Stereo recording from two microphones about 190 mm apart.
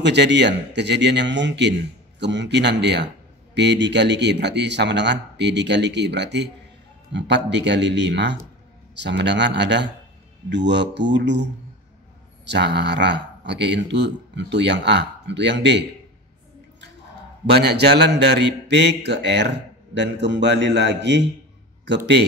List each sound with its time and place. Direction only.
0.0 s a man's voice: 65° right (ahead or behind)
12.4 s a man's voice: 65° right (ahead or behind)
17.5 s a man's voice: 60° right (ahead or behind)